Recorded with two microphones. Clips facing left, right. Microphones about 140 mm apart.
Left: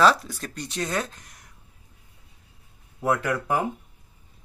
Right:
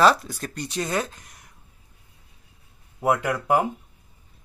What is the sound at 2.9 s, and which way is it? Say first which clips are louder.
Speech: right 2 dB; 15° right (ahead or behind).